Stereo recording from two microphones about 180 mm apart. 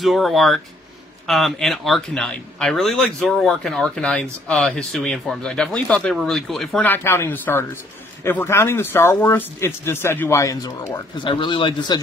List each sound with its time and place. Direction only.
0.0 s speech: centre (ahead or behind); by 12.0 s 25° left (ahead or behind)